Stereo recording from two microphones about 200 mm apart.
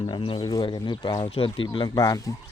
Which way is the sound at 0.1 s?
25° left (ahead or behind).